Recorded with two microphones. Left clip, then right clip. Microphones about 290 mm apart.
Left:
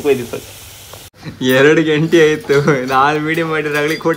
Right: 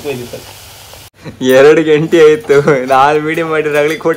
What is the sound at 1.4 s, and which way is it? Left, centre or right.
Speech, centre.